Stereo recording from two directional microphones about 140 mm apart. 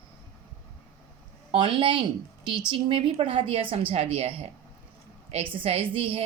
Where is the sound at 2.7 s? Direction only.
40° right (ahead or behind).